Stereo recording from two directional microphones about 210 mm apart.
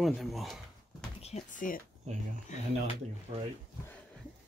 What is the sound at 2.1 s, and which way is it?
Speech, 35° right (ahead or behind).